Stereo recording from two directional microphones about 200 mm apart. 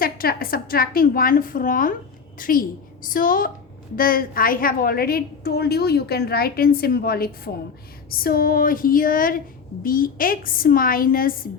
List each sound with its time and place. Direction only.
0.0 s a woman's voice: 50° left (ahead or behind)